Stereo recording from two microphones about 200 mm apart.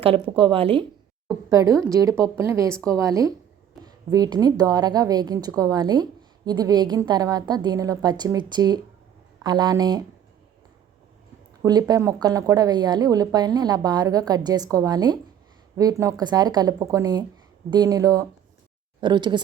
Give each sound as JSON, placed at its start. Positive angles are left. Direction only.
{"t": 0.0, "sound": "a woman's voice", "side_deg": -25}
{"t": 1.5, "sound": "a woman's voice", "side_deg": -15}
{"t": 11.6, "sound": "a woman's voice", "side_deg": -20}